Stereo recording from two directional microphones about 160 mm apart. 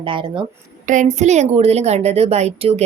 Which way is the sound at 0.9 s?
50° right (ahead or behind).